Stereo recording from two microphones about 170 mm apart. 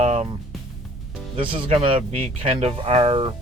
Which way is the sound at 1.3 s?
30° right (ahead or behind).